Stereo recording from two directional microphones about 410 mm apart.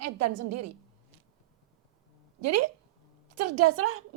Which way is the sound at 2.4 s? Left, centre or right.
Right.